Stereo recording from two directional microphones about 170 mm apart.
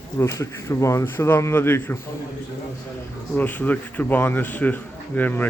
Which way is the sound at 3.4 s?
10° left (ahead or behind).